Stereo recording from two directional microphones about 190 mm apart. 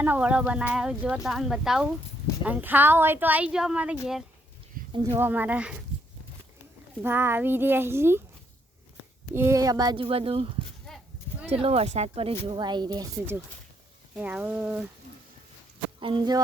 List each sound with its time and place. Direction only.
0.0 s a woman's voice: 10° right (ahead or behind)
4.9 s a woman's voice: 15° right (ahead or behind)
7.0 s a woman's voice: 10° right (ahead or behind)
9.3 s speech: 15° right (ahead or behind); by 10.5 s 30° right (ahead or behind)
10.8 s livestock: centre (ahead or behind)
11.4 s a woman's voice: 30° right (ahead or behind); by 14.8 s 10° right (ahead or behind)
16.0 s speech: 25° right (ahead or behind)